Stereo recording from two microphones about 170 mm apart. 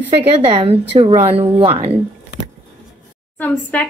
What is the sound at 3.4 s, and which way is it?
Speech, 10° left (ahead or behind).